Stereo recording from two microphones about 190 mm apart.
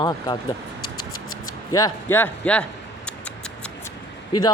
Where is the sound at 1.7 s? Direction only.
15° left (ahead or behind).